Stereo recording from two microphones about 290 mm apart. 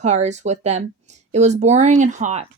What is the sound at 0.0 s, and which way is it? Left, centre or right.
Speech, right.